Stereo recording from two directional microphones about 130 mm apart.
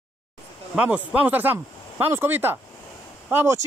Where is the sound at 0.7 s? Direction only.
10° right (ahead or behind).